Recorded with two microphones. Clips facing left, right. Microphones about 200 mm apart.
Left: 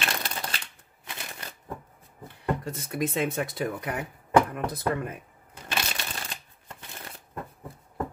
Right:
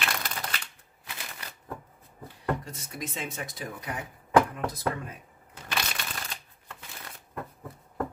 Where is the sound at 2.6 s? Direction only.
60° left (ahead or behind).